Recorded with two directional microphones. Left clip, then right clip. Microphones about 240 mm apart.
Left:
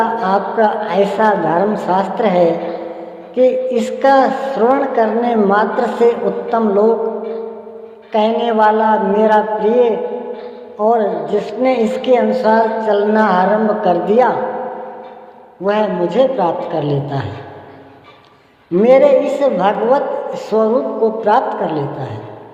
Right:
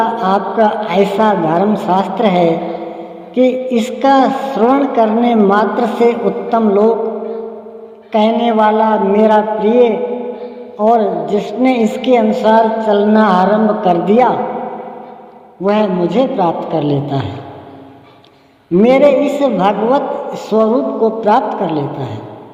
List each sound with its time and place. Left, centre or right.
0.0 s a woman's voice: right
8.1 s a woman's voice: right
15.6 s a woman's voice: right
18.8 s a woman's voice: right